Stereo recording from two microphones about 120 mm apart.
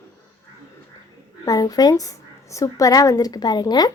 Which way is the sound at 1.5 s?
30° left (ahead or behind).